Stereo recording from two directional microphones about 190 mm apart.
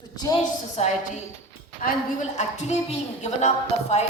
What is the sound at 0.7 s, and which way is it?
Speech, 35° left (ahead or behind).